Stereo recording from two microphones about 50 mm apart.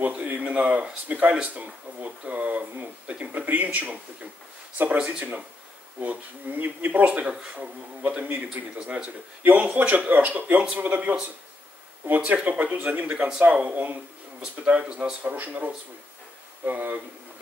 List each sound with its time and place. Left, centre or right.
0.0 s speech: right
12.4 s speech: right
14.4 s speech: right
15.3 s speech: right